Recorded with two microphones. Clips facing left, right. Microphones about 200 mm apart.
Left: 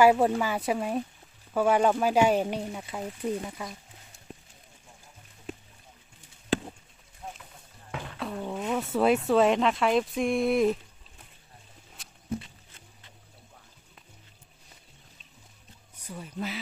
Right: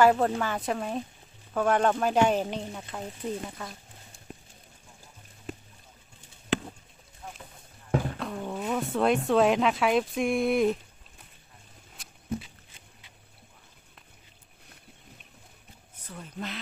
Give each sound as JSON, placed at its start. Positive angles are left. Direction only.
{"t": 0.0, "sound": "speech", "side_deg": 10}
{"t": 7.2, "sound": "boat", "side_deg": 25}
{"t": 8.2, "sound": "speech", "side_deg": 5}
{"t": 12.0, "sound": "wild animals", "side_deg": -5}
{"t": 16.0, "sound": "speech", "side_deg": 10}